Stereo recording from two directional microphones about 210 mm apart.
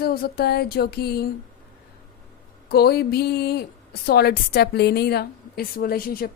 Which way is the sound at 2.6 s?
50° left (ahead or behind).